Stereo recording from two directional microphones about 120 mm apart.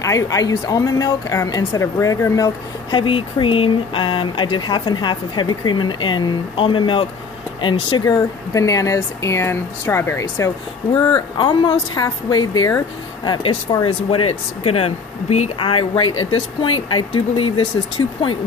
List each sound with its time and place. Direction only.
0.0 s a woman's voice: 25° left (ahead or behind)
2.9 s a woman's voice: 45° left (ahead or behind); by 10.5 s 25° left (ahead or behind)
11.3 s a woman's voice: 40° left (ahead or behind)
14.6 s speech: 55° left (ahead or behind)